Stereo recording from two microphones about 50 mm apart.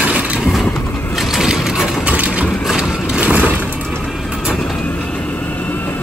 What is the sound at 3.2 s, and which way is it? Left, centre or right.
Music, right.